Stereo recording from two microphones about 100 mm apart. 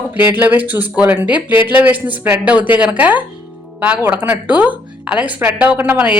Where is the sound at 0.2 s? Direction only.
20° right (ahead or behind).